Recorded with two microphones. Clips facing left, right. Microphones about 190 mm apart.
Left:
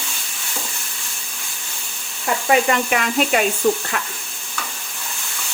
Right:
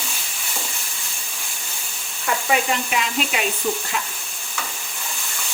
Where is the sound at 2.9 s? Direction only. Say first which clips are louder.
Left 5 dB; 55° left (ahead or behind).